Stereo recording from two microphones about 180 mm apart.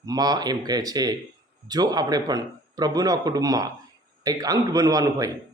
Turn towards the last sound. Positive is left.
turn(degrees=-20)  # may be behind; listen again after turning